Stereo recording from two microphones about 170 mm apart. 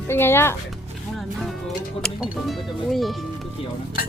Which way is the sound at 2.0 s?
5° left (ahead or behind).